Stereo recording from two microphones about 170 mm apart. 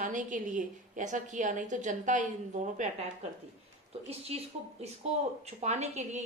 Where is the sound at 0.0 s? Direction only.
50° right (ahead or behind).